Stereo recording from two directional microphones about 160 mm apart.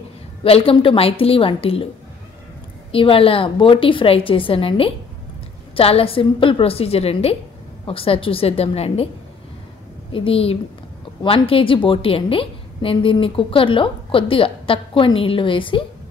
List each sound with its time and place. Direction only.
0.4 s a woman's voice: 35° left (ahead or behind)
2.9 s a woman's voice: 35° left (ahead or behind)
10.1 s a woman's voice: 35° left (ahead or behind)